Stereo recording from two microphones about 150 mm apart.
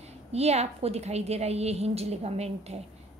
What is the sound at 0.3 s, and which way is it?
A woman's voice, 45° right (ahead or behind).